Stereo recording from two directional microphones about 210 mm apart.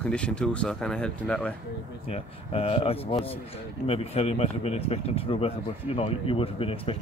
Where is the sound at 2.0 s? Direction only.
25° left (ahead or behind).